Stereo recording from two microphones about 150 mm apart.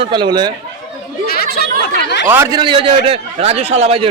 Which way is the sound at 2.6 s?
35° right (ahead or behind).